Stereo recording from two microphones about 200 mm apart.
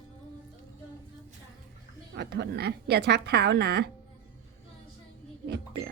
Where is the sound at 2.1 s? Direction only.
60° right (ahead or behind).